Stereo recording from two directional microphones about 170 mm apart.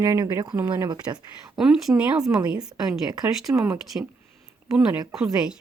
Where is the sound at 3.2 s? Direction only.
20° right (ahead or behind).